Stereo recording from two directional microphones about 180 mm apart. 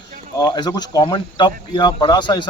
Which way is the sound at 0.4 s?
25° left (ahead or behind).